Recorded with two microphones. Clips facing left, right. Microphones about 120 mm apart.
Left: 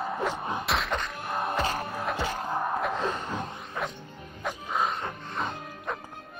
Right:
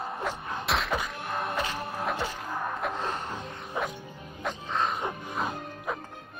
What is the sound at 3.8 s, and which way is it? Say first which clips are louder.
Music: right 2 dB; 15° right (ahead or behind).